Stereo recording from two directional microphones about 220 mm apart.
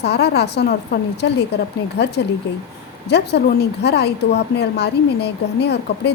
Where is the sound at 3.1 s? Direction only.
50° left (ahead or behind).